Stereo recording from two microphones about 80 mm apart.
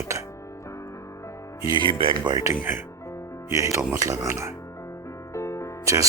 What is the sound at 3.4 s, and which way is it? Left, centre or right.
Speech, right.